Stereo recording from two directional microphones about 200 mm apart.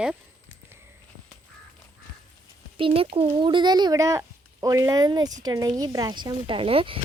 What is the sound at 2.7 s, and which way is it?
Speech, 25° right (ahead or behind).